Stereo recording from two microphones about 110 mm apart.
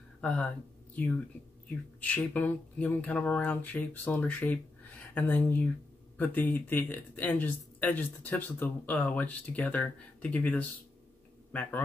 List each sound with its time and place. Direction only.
0.2 s speech: 10° left (ahead or behind)